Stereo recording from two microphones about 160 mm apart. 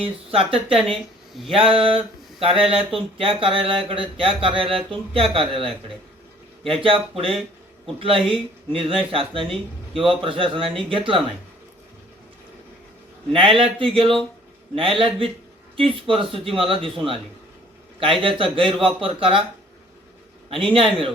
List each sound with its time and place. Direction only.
0.0 s speech: 35° right (ahead or behind)
13.3 s speech: 35° right (ahead or behind)
20.5 s speech: 35° right (ahead or behind)